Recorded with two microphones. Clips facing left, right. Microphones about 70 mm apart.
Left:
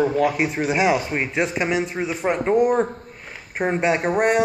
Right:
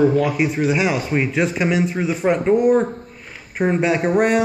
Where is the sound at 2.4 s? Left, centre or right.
Left.